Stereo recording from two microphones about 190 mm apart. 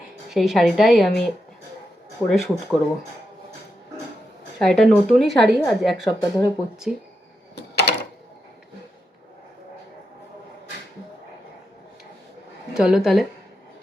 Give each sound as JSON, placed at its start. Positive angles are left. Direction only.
{"t": 0.3, "sound": "speech", "side_deg": 0}
{"t": 4.6, "sound": "speech", "side_deg": 0}
{"t": 7.5, "sound": "door", "side_deg": 60}
{"t": 12.7, "sound": "speech", "side_deg": -5}